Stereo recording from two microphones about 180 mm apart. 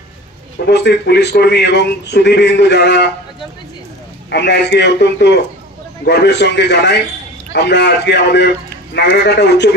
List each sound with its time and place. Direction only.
0.7 s a man's voice: 70° left (ahead or behind)
4.3 s a man's voice: 70° left (ahead or behind)